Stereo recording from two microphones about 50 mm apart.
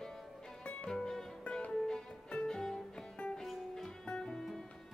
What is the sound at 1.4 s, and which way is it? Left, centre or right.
Music, left.